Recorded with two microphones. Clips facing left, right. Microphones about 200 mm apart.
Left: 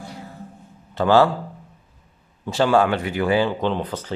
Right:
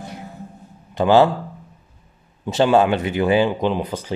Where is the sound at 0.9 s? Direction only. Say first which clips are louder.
Right 2 dB; 20° right (ahead or behind).